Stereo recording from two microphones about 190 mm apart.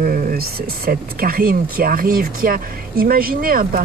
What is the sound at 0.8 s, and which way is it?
Speech, 50° right (ahead or behind).